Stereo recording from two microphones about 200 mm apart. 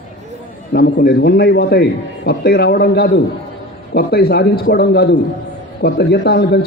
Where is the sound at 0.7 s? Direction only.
50° left (ahead or behind).